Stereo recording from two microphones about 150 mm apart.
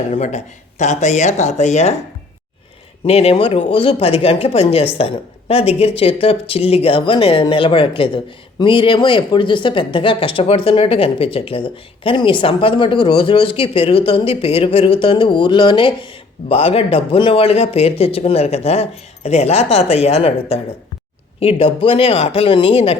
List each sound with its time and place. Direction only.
0.1 s speech: 50° left (ahead or behind)
3.0 s speech: 45° left (ahead or behind)